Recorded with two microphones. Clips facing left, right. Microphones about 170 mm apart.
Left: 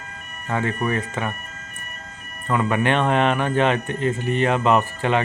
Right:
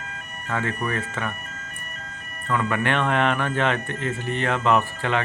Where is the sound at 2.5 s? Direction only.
20° left (ahead or behind).